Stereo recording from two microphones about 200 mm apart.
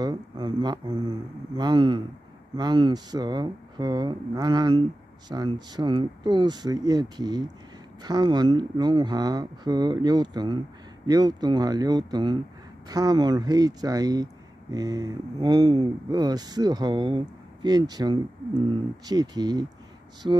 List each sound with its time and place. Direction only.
0.0 s speech: 20° right (ahead or behind)